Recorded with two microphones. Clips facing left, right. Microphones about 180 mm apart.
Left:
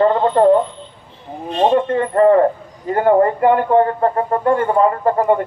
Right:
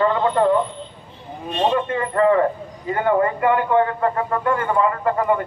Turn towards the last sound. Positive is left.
turn(degrees=35)  # may be behind; listen again after turning